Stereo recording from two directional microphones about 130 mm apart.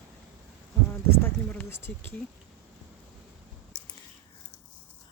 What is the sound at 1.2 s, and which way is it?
Speech, 15° left (ahead or behind).